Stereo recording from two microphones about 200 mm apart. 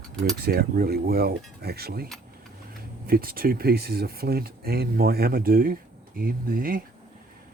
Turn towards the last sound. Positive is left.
turn(degrees=-45)  # may be behind; listen again after turning